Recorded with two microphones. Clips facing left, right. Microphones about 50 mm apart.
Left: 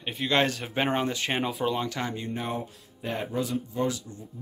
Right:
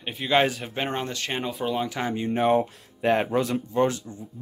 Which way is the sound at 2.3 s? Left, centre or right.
Right.